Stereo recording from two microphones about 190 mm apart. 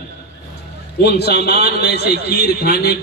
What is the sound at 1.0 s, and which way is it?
A man's voice, 60° left (ahead or behind).